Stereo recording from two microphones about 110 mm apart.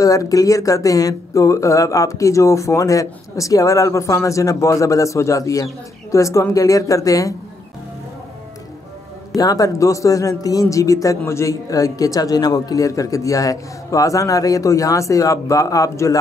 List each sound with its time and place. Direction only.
0.0 s speech: 30° left (ahead or behind)
9.4 s speech: 30° left (ahead or behind)